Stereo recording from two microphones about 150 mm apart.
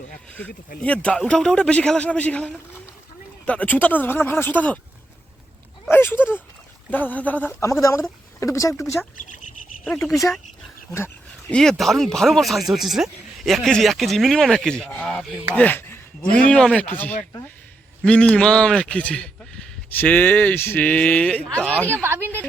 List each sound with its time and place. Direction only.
0.8 s speech: 5° left (ahead or behind)
5.9 s speech: 15° left (ahead or behind)
9.8 s speech: 5° left (ahead or behind)
10.9 s speech: 15° left (ahead or behind)
18.0 s speech: 5° left (ahead or behind)
22.0 s speech: 15° right (ahead or behind)